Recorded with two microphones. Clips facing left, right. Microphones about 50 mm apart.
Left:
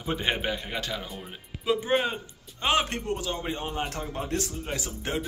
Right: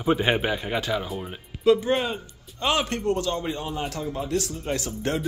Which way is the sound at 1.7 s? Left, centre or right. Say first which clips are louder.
Right 5 dB; centre.